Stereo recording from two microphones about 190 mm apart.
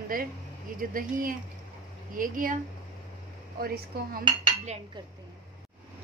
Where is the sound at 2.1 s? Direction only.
45° right (ahead or behind).